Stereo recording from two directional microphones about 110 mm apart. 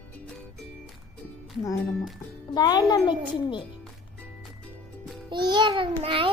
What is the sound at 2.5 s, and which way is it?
Speech, 40° left (ahead or behind).